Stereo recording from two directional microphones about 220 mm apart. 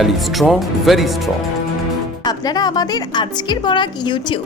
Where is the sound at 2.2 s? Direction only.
20° left (ahead or behind).